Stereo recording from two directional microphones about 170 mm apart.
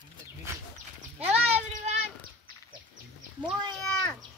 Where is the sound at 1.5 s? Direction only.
40° right (ahead or behind).